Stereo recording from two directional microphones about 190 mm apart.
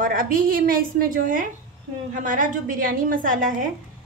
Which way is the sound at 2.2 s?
45° right (ahead or behind).